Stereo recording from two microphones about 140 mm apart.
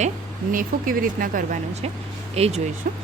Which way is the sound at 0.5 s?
80° right.